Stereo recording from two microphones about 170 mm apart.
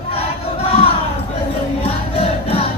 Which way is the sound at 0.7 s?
35° left (ahead or behind).